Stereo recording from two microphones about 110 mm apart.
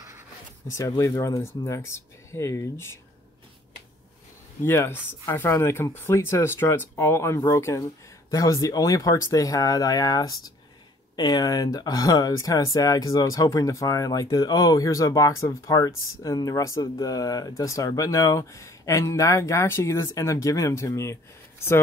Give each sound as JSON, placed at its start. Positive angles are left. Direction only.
{"t": 0.7, "sound": "speech", "side_deg": 30}
{"t": 4.6, "sound": "speech", "side_deg": 20}